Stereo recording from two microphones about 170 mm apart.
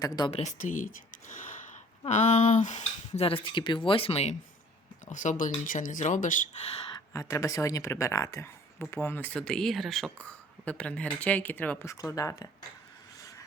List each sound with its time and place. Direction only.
0.0 s speech: 20° left (ahead or behind)
0.3 s speech: 40° left (ahead or behind)
6.9 s speech: 20° left (ahead or behind)